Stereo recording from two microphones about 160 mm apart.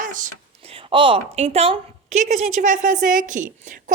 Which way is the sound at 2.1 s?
50° right (ahead or behind).